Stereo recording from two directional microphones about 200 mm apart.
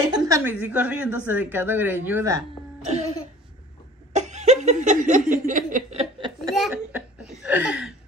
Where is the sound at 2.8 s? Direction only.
35° right (ahead or behind).